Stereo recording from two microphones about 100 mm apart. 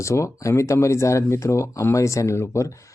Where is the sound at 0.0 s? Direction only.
30° left (ahead or behind).